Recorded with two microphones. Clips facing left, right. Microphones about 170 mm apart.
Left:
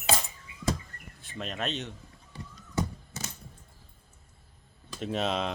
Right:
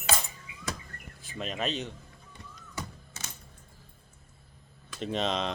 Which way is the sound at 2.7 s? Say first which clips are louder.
Left 9 dB; 35° left (ahead or behind).